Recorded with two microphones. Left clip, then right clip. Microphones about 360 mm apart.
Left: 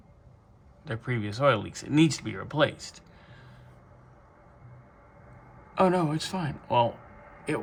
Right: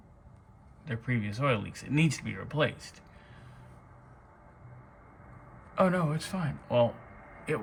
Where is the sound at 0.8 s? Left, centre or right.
Centre.